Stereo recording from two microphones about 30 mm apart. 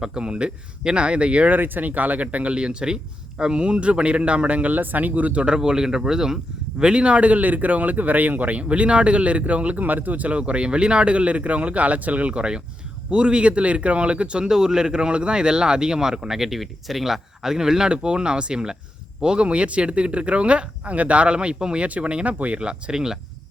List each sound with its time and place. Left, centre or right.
0.1 s speech: right
1.5 s speech: right
2.2 s speech: right
4.7 s speech: right
5.5 s speech: right
6.8 s speech: right
9.7 s speech: right
12.4 s speech: right
14.5 s speech: right
19.5 s speech: right
21.8 s speech: right
22.9 s speech: centre